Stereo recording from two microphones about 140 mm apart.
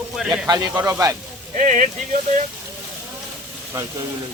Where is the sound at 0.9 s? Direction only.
25° right (ahead or behind).